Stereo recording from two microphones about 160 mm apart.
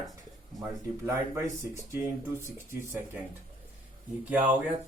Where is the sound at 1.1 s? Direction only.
15° right (ahead or behind).